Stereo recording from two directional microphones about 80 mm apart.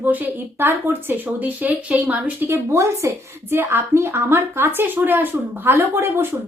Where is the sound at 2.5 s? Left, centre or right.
Right.